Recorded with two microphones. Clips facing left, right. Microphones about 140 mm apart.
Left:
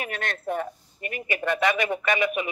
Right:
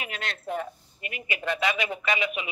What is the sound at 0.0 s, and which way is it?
Speech, 50° left (ahead or behind).